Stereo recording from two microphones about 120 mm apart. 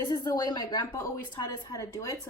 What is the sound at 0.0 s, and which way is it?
Speech, 35° left (ahead or behind).